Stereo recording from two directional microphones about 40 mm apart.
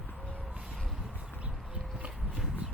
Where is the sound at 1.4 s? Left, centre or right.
Right.